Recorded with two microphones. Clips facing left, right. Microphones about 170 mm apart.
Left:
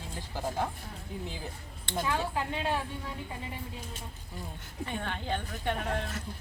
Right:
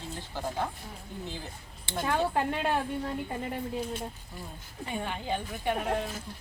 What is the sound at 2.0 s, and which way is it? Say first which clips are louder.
Speech: right 4 dB; 55° right (ahead or behind).